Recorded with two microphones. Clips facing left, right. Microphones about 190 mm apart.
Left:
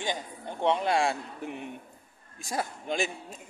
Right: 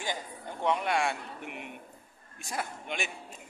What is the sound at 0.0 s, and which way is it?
A man's voice, 25° left (ahead or behind).